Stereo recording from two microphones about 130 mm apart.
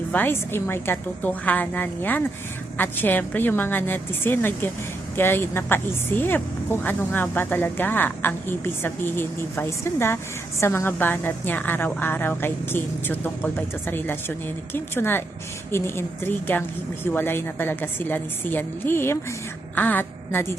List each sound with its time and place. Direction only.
0.1 s speech: 15° left (ahead or behind)